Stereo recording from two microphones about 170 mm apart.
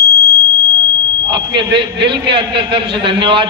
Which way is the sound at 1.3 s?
30° right (ahead or behind).